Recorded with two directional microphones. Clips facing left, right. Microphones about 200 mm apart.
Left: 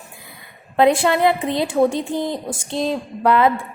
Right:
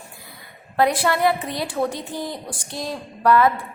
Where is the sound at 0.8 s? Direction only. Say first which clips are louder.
Left 4 dB; 25° left (ahead or behind).